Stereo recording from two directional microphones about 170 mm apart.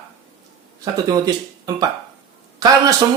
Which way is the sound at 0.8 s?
20° right (ahead or behind).